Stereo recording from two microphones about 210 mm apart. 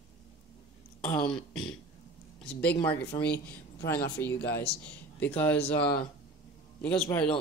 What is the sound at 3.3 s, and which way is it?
Speech, 50° left (ahead or behind).